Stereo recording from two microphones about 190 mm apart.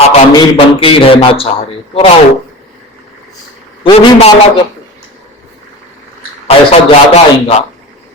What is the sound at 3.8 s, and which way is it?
Speech, 35° left (ahead or behind).